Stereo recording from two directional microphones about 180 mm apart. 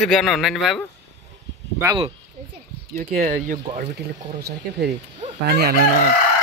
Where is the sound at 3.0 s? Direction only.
45° right (ahead or behind).